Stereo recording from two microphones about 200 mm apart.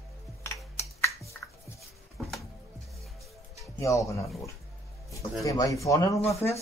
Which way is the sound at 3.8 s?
15° left (ahead or behind).